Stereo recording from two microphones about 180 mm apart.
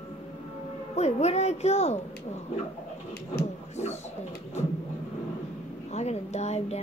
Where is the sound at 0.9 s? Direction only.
40° left (ahead or behind).